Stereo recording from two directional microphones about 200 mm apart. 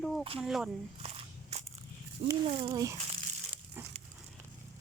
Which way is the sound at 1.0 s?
30° right (ahead or behind).